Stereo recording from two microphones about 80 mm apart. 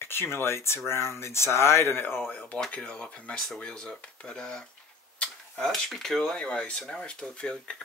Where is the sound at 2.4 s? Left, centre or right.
Centre.